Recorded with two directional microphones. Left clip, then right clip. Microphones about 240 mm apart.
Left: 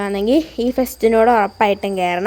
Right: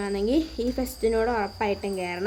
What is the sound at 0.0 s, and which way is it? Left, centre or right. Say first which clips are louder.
A woman's voice: left 8 dB; left.